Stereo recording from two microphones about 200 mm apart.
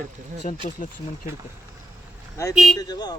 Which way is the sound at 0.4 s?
40° left (ahead or behind).